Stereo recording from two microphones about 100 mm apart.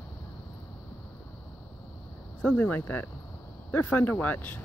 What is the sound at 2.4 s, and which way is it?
Speech, 15° left (ahead or behind).